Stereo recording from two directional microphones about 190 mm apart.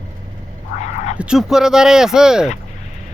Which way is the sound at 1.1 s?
5° right (ahead or behind).